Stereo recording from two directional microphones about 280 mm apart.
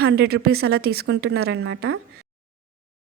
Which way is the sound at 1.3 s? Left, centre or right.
Right.